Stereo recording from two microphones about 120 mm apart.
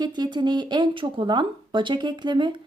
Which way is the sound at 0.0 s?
35° right (ahead or behind).